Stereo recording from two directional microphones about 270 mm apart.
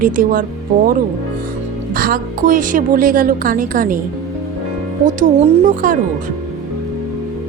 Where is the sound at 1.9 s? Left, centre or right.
Right.